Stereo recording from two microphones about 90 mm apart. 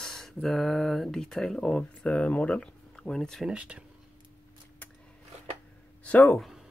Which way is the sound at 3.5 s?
15° right (ahead or behind).